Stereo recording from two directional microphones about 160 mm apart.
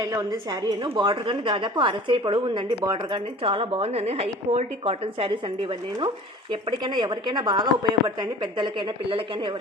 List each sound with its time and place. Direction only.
0.0 s a woman's voice: 25° right (ahead or behind)
6.5 s a woman's voice: 30° right (ahead or behind)